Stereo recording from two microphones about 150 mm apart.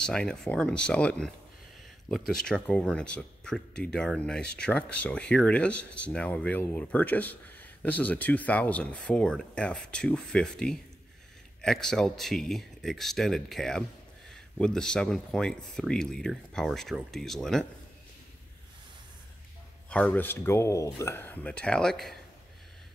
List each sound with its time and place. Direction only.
0.0 s speech: 5° left (ahead or behind)
19.9 s speech: 10° left (ahead or behind)